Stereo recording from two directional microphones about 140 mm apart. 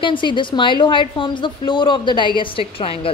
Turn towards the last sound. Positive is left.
turn(degrees=40)  # may be behind; listen again after turning